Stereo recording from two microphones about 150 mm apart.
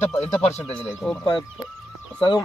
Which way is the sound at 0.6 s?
5° left (ahead or behind).